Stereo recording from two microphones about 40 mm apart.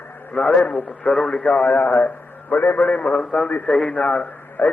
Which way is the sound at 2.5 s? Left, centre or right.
Left.